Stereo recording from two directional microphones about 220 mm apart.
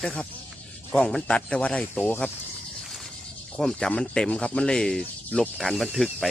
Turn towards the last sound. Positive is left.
turn(degrees=0)  # may be behind; listen again after turning